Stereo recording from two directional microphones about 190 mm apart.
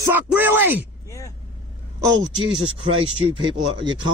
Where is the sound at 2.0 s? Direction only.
25° right (ahead or behind).